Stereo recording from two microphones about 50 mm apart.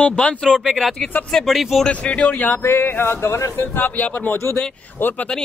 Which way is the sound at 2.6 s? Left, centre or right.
Left.